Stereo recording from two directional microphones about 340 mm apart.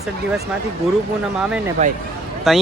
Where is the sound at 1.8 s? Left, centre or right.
Centre.